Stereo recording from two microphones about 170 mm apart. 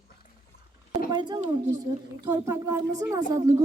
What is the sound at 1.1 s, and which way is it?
Speech, 25° right (ahead or behind).